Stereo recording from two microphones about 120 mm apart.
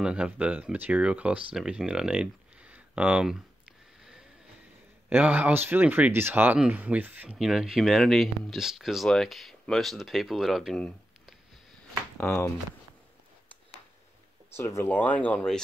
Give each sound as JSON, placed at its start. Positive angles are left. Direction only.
{"t": 0.0, "sound": "speech", "side_deg": -10}
{"t": 7.3, "sound": "speech", "side_deg": -5}
{"t": 14.5, "sound": "speech", "side_deg": 25}
{"t": 14.9, "sound": "speech", "side_deg": 15}